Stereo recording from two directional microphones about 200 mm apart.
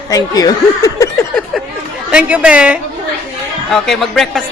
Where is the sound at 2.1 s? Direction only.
5° right (ahead or behind).